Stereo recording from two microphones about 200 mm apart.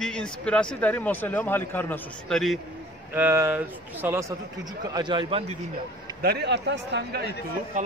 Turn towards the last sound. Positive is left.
turn(degrees=-40)  # may be behind; listen again after turning